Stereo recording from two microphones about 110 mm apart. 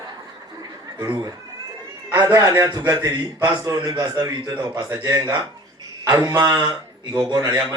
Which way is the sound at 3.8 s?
40° right (ahead or behind).